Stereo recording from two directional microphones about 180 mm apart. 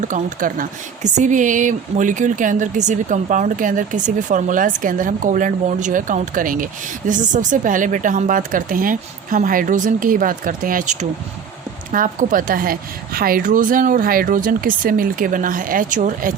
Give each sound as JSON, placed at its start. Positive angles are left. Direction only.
{"t": 0.0, "sound": "speech", "side_deg": -45}